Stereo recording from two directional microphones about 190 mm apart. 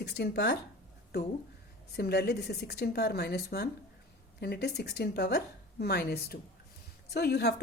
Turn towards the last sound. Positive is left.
turn(degrees=55)  # may be behind; listen again after turning